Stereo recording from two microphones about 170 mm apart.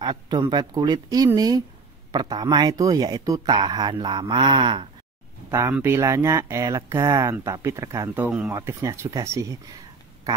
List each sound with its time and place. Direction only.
0.0 s speech: 25° right (ahead or behind)
5.5 s speech: 15° right (ahead or behind)